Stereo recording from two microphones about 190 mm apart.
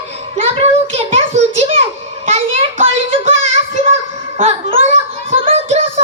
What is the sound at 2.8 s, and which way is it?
Child singing, 30° right (ahead or behind).